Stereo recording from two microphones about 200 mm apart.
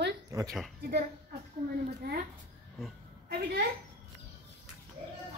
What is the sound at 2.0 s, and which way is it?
Speech, 55° right (ahead or behind).